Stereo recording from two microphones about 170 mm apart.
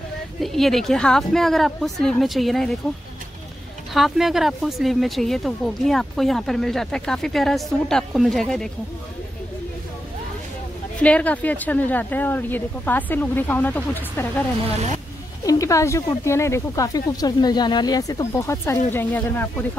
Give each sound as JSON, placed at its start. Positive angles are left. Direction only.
{"t": 0.4, "sound": "speech", "side_deg": 0}
{"t": 3.9, "sound": "speech", "side_deg": 0}
{"t": 11.0, "sound": "speech", "side_deg": 5}
{"t": 15.4, "sound": "speech", "side_deg": 20}